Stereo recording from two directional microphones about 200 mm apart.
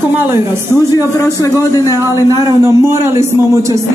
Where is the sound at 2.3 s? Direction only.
15° right (ahead or behind).